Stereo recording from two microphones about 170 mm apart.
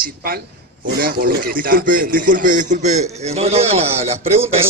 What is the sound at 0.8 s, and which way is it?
Speech, 60° right (ahead or behind).